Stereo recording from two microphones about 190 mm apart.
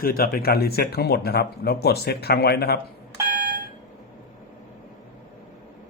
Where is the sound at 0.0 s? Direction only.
50° left (ahead or behind).